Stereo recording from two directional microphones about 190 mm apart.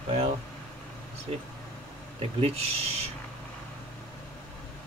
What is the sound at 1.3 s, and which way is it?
Speech, 35° right (ahead or behind).